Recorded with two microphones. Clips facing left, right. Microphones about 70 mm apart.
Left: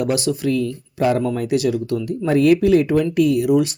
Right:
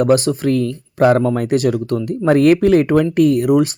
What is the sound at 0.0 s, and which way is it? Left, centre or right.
Speech, right.